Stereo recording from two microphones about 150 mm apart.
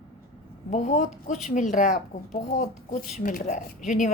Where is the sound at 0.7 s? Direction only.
50° left (ahead or behind).